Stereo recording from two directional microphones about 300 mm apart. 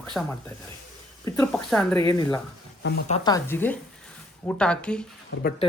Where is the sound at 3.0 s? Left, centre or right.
Centre.